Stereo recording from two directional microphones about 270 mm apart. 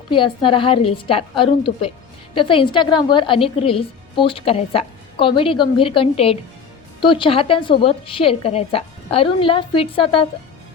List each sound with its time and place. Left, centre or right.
0.1 s a woman's voice: centre